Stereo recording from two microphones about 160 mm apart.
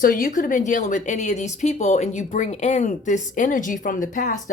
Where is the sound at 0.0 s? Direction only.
60° left (ahead or behind).